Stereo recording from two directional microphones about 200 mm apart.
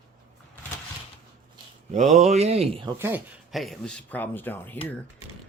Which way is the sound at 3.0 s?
10° right (ahead or behind).